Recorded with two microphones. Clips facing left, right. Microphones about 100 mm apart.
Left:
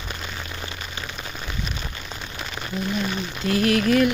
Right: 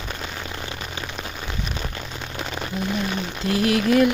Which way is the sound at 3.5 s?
20° right (ahead or behind).